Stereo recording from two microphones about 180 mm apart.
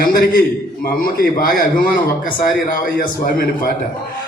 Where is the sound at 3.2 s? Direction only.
55° left (ahead or behind).